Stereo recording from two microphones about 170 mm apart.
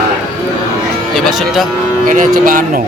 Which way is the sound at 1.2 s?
Centre (ahead or behind).